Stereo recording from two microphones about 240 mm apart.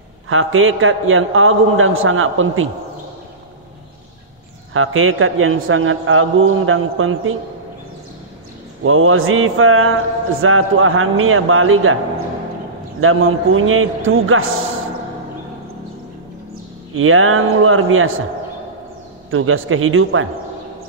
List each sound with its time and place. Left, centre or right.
0.3 s a man's voice: right
4.7 s a man's voice: right
8.8 s a man's voice: right
13.0 s a man's voice: right
16.9 s a man's voice: right
19.3 s a man's voice: right